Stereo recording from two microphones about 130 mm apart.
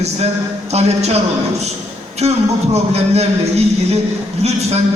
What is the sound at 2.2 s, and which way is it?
A man's voice, 55° right (ahead or behind).